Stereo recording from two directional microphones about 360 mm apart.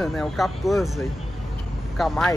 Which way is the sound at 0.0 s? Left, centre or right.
Centre.